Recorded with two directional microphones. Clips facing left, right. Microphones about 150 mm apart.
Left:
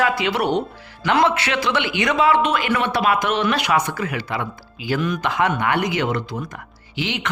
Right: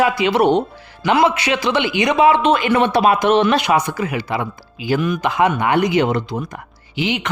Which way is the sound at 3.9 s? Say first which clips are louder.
Right 4 dB; 15° right (ahead or behind).